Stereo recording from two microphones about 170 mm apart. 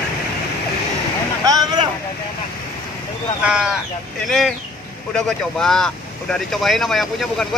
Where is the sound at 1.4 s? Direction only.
20° right (ahead or behind).